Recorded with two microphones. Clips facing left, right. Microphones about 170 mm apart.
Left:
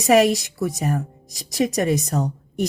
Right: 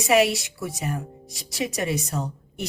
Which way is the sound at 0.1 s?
45° left (ahead or behind).